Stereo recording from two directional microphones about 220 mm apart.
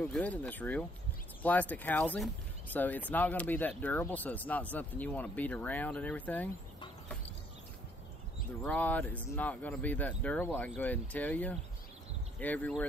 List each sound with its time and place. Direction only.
0.1 s speech: 5° left (ahead or behind)
8.6 s speech: 5° left (ahead or behind)